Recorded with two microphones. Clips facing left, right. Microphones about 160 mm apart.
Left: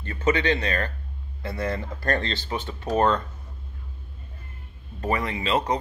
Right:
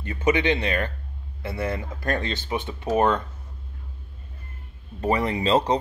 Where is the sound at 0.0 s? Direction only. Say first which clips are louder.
Right 1 dB; 15° right (ahead or behind).